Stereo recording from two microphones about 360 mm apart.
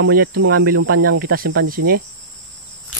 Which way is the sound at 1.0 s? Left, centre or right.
Right.